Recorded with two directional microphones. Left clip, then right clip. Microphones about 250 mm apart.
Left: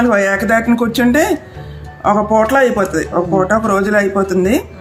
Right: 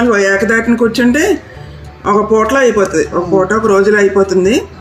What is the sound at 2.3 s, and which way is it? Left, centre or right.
Speech, left.